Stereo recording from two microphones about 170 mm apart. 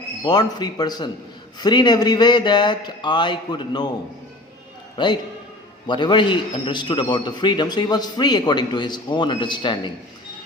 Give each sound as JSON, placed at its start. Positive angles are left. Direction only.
{"t": 0.2, "sound": "a man's voice", "side_deg": 25}
{"t": 4.9, "sound": "a man's voice", "side_deg": 25}